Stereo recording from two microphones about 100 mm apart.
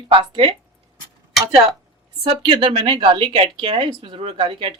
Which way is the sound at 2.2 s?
60° right (ahead or behind).